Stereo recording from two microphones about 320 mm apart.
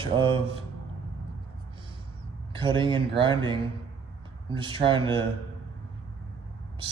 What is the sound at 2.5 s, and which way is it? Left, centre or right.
Speech, centre.